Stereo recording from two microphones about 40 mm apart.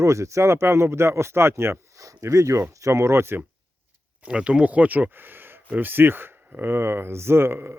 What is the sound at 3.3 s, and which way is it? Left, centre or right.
Speech, right.